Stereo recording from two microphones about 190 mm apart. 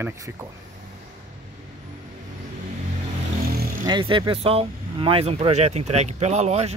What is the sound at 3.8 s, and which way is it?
Speech, 25° right (ahead or behind).